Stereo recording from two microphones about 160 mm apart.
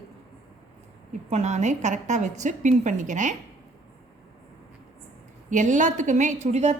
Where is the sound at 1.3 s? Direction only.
45° right (ahead or behind).